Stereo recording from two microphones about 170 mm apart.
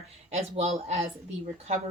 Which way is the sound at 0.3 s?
40° right (ahead or behind).